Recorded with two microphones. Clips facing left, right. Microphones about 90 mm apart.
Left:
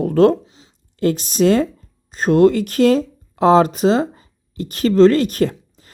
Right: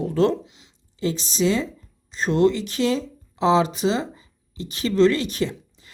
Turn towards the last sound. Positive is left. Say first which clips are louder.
# left 7 dB
turn(degrees=45)  # may be behind; listen again after turning